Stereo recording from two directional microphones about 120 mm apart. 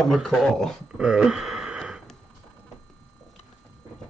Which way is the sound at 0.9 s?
10° right (ahead or behind).